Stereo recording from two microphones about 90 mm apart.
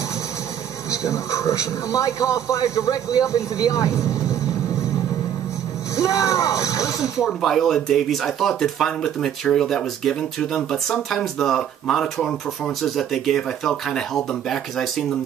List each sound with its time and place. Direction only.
1.0 s speech: 35° left (ahead or behind)
5.9 s speech: 40° left (ahead or behind)
7.2 s speech: 5° left (ahead or behind)